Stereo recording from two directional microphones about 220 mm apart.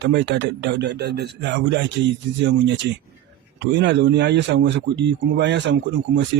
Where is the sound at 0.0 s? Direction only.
50° right (ahead or behind).